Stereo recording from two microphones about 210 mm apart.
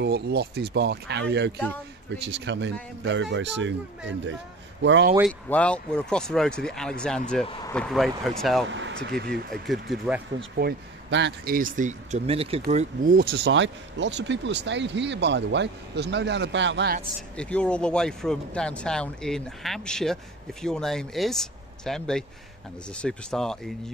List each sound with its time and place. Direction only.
0.0 s speech: 50° right (ahead or behind)
4.8 s speech: 60° right (ahead or behind)
5.5 s speech: 5° left (ahead or behind)
7.4 s speech: 20° left (ahead or behind)
7.7 s speech: centre (ahead or behind)
8.6 s speech: 60° right (ahead or behind)
9.5 s speech: centre (ahead or behind)
10.5 s speech: 50° right (ahead or behind); by 12.6 s 25° right (ahead or behind)
12.6 s speech: 40° right (ahead or behind)
17.4 s speech: 5° left (ahead or behind)